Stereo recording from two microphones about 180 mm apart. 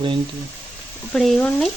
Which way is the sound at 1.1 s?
5° left (ahead or behind).